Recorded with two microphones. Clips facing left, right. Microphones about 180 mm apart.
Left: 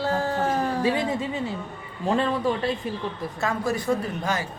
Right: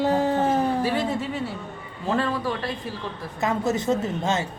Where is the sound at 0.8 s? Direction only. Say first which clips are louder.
Left 1 dB; 15° left (ahead or behind).